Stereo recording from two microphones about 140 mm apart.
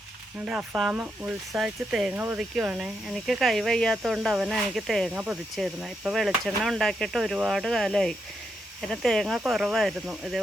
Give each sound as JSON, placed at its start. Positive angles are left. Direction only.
{"t": 0.3, "sound": "speech", "side_deg": -10}